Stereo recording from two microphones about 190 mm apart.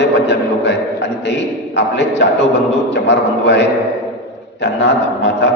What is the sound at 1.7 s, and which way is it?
A man's voice, 65° left (ahead or behind).